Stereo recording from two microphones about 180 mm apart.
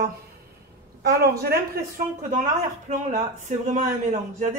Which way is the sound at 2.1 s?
45° right (ahead or behind).